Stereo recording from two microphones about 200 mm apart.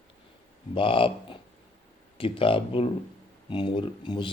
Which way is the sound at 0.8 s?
25° left (ahead or behind).